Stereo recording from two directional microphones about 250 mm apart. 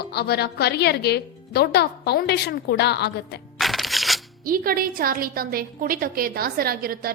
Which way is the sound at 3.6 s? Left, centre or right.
Centre.